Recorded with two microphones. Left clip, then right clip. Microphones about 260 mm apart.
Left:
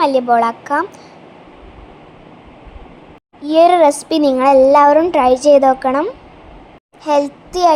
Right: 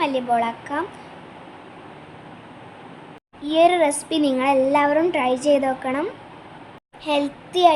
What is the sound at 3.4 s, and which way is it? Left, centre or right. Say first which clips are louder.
Speech: left 7 dB; left.